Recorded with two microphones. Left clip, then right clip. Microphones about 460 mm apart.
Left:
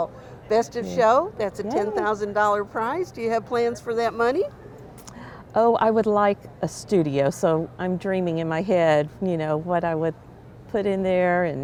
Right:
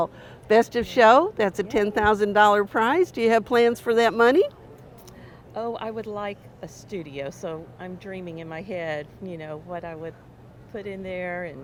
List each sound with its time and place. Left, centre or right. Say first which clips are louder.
0.0 s speech: right 1 dB; right
5.5 s speech: left 12 dB; left